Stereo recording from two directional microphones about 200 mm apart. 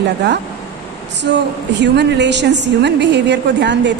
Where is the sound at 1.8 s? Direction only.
60° right (ahead or behind).